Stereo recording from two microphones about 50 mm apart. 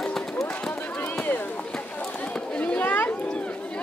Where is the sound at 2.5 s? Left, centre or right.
Left.